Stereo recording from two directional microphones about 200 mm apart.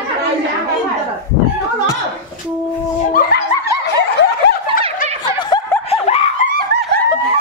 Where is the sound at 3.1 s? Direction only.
50° left (ahead or behind).